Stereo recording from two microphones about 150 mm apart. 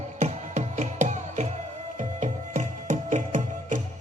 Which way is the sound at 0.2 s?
50° right (ahead or behind).